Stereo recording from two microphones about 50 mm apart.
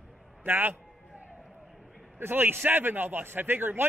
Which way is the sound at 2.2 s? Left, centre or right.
Right.